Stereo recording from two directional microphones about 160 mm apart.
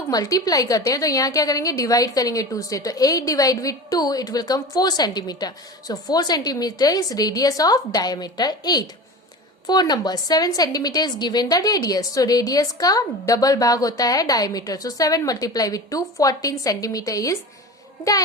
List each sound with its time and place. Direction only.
0.1 s a woman's voice: 20° left (ahead or behind)